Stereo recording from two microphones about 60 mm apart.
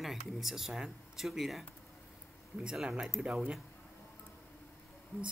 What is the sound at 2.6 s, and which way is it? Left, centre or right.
Speech, centre.